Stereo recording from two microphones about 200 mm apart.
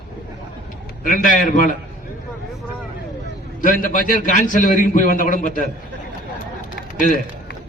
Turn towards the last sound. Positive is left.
turn(degrees=40)  # may be behind; listen again after turning